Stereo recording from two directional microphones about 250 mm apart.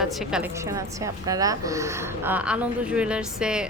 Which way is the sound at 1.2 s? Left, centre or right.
Centre.